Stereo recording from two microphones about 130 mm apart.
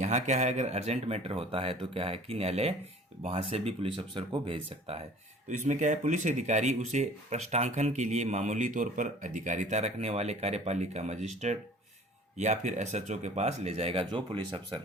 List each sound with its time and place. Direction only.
0.0 s speech: 65° right (ahead or behind); by 4.9 s 45° right (ahead or behind)
5.5 s speech: 70° right (ahead or behind); by 14.6 s 40° right (ahead or behind)